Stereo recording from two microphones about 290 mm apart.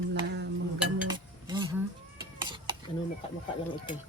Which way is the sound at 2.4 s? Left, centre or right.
Centre.